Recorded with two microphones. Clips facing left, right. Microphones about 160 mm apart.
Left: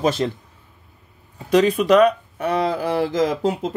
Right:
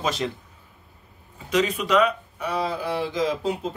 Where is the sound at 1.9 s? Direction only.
50° left (ahead or behind).